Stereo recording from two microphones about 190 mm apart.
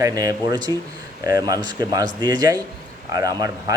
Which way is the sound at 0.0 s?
20° right (ahead or behind).